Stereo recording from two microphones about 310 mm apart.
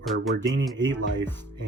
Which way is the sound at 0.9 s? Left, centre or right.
Right.